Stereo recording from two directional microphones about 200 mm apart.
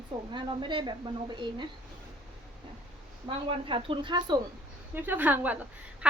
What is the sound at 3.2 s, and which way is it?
A woman's voice, 25° right (ahead or behind).